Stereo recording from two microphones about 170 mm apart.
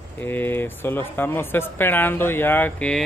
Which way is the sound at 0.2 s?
10° left (ahead or behind).